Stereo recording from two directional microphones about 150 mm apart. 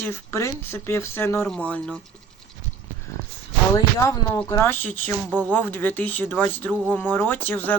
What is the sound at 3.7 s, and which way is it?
Speech, 20° left (ahead or behind).